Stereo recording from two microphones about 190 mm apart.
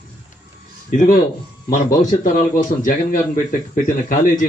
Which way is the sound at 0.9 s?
45° left (ahead or behind).